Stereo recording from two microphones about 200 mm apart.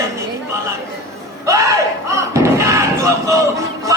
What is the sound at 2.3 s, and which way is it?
Music, 15° right (ahead or behind).